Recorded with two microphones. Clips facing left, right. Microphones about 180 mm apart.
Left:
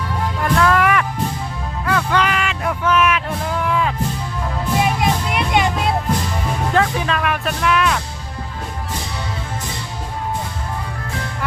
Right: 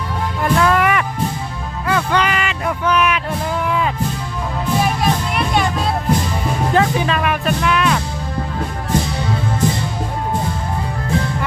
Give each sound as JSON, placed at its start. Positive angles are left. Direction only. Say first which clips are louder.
{"t": 0.4, "sound": "music", "louder": "right 1 dB", "side_deg": -5}
{"t": 4.8, "sound": "music", "louder": "even", "side_deg": 20}
{"t": 6.7, "sound": "music", "louder": "right 2 dB", "side_deg": 0}